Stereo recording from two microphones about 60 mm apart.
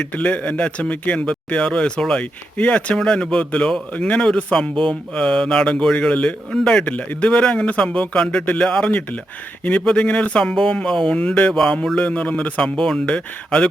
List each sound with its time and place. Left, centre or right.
0.1 s speech: left
2.9 s speech: centre
6.9 s speech: left
9.8 s speech: centre
10.4 s speech: centre
11.9 s speech: left
12.6 s speech: centre
13.1 s speech: centre